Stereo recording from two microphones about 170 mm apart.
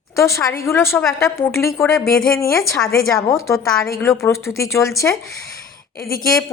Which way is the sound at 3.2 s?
15° left (ahead or behind).